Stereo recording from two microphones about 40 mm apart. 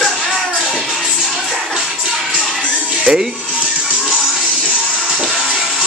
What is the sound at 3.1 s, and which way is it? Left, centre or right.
Speech, right.